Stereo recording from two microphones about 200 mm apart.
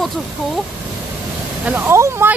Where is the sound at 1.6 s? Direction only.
10° right (ahead or behind).